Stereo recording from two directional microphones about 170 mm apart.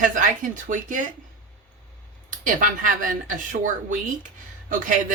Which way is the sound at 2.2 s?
50° right (ahead or behind).